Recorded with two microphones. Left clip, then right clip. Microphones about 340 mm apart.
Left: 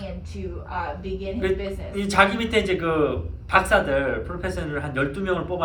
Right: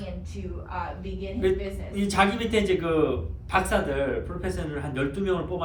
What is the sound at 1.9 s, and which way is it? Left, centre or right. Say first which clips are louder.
A man's voice: left 4 dB; centre.